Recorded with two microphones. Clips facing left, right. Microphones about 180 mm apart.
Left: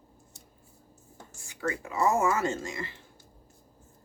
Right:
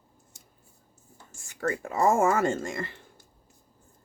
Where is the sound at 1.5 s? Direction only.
50° right (ahead or behind).